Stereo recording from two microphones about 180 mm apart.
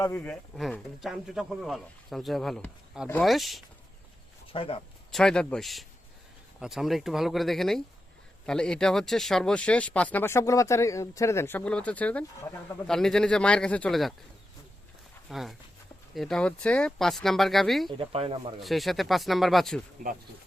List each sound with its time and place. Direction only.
0.0 s speech: 15° left (ahead or behind)
0.5 s speech: centre (ahead or behind)
4.5 s speech: 30° left (ahead or behind)
5.1 s speech: 5° left (ahead or behind)
15.3 s speech: centre (ahead or behind)
17.9 s speech: 30° right (ahead or behind)
18.6 s speech: centre (ahead or behind)